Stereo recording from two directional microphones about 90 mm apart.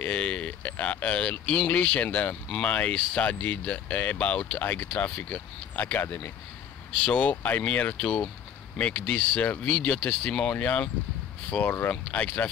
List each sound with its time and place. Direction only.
0.0 s speech: 10° left (ahead or behind)